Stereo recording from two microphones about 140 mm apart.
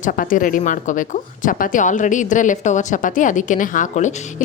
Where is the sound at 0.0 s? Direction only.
75° left (ahead or behind).